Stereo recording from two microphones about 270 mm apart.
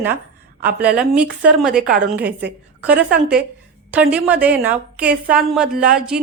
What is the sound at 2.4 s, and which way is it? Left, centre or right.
A woman's voice, centre.